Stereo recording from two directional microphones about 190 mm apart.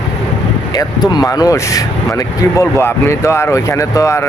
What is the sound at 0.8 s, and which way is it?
Speech, 20° left (ahead or behind).